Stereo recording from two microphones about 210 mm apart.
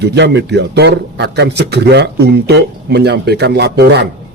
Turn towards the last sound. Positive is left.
turn(degrees=-50)  # may be behind; listen again after turning